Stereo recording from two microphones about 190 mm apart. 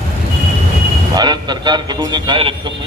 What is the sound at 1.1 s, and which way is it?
Speech, 20° right (ahead or behind).